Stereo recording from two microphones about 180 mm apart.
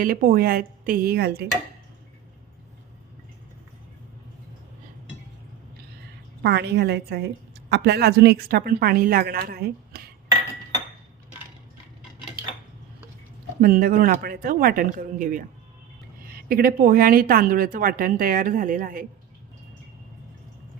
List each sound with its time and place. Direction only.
0.0 s a woman's voice: 55° right (ahead or behind)
6.4 s a woman's voice: 65° right (ahead or behind)
13.6 s a woman's voice: 55° right (ahead or behind)